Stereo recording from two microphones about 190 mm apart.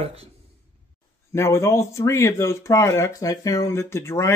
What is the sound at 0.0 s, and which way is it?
Speech, 30° right (ahead or behind).